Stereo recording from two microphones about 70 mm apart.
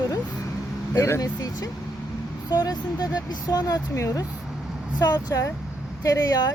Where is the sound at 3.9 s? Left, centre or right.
Left.